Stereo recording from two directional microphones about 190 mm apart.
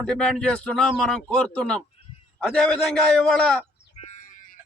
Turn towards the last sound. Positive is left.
turn(degrees=5)  # may be behind; listen again after turning